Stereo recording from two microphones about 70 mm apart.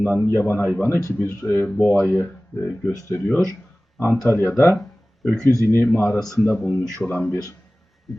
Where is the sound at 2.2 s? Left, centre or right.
Left.